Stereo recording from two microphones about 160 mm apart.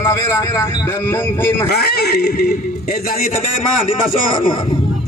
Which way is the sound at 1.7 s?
85° left.